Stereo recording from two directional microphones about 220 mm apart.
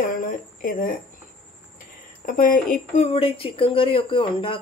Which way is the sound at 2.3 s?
40° left (ahead or behind).